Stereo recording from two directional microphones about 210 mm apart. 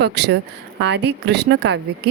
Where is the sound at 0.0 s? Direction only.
55° right (ahead or behind).